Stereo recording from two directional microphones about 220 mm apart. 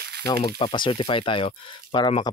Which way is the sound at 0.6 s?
25° left (ahead or behind).